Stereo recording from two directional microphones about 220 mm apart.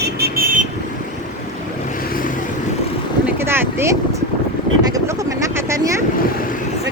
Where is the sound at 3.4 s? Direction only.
10° right (ahead or behind).